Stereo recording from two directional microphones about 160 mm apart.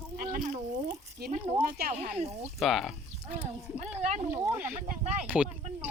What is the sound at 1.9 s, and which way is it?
Speech, 45° right (ahead or behind).